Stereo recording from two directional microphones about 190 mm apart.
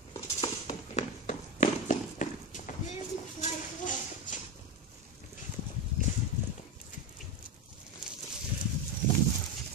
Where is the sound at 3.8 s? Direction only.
45° left (ahead or behind).